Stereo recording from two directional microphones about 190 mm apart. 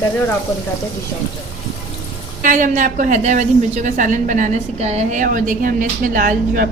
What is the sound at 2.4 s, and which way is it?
A woman's voice, 40° right (ahead or behind).